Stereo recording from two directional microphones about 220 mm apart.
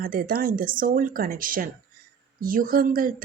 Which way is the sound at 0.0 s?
40° right (ahead or behind).